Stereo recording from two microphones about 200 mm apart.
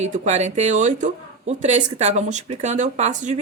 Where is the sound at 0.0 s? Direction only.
35° right (ahead or behind).